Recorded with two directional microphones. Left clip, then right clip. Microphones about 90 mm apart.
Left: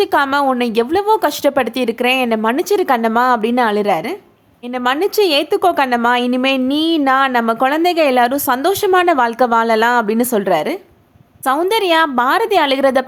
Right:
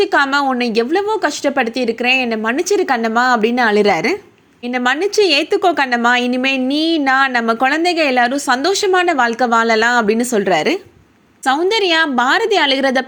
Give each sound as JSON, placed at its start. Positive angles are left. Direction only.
{"t": 0.0, "sound": "a woman's voice", "side_deg": 20}
{"t": 3.8, "sound": "a woman's voice", "side_deg": -20}
{"t": 4.8, "sound": "a woman's voice", "side_deg": 15}
{"t": 10.4, "sound": "a woman's voice", "side_deg": 5}
{"t": 11.6, "sound": "a woman's voice", "side_deg": 35}